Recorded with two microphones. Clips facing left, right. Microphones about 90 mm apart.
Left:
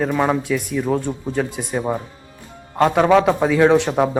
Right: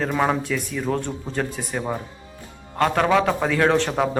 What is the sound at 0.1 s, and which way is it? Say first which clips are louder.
Speech: left 3 dB; centre (ahead or behind).